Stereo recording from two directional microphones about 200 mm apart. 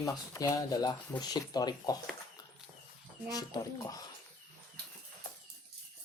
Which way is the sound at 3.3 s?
20° left (ahead or behind).